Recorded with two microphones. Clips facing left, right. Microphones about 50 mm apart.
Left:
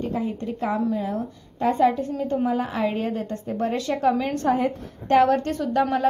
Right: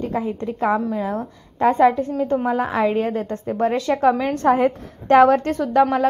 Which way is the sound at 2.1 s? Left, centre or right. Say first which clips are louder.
Right 4 dB; right.